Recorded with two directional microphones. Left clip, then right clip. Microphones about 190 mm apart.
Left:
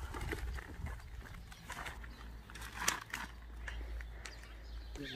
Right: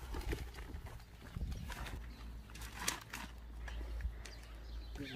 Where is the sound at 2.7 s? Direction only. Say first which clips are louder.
Left 5 dB; 15° right (ahead or behind).